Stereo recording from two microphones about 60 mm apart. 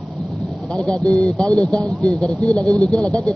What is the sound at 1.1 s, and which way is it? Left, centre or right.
Speech, right.